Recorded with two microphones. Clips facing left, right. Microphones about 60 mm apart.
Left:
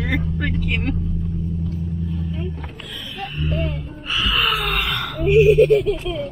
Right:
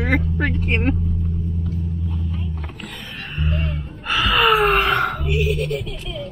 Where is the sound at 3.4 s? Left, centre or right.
Right.